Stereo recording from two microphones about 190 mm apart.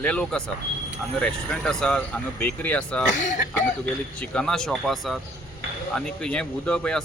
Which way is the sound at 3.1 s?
40° left (ahead or behind).